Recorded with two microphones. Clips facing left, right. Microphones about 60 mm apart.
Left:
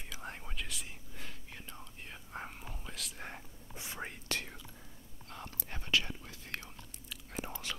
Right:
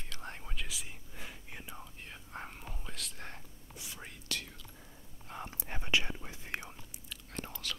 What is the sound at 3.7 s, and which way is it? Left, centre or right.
Whispering, left.